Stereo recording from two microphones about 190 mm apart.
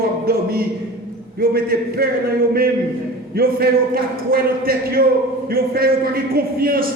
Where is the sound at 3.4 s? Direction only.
50° right (ahead or behind).